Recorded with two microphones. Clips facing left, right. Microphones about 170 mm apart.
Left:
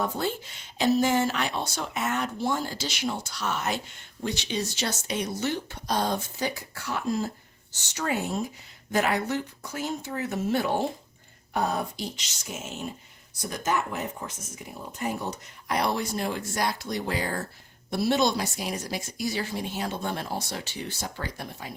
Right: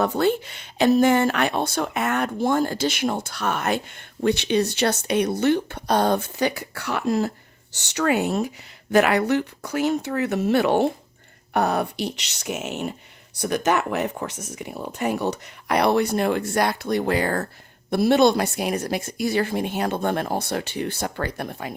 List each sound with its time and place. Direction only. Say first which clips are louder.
0.0 s speech: right 8 dB; 70° right (ahead or behind)